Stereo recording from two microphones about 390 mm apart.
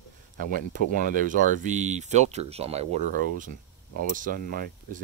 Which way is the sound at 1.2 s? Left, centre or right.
Centre.